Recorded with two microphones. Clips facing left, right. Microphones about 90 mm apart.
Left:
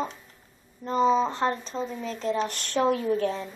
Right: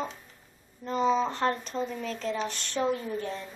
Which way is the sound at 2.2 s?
35° left (ahead or behind).